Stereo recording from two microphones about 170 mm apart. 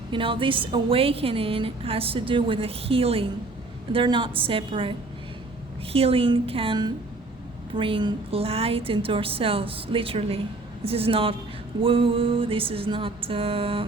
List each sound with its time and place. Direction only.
0.1 s a woman's voice: 30° right (ahead or behind)